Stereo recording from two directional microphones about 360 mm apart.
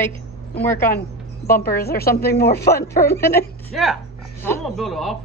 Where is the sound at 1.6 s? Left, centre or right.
Left.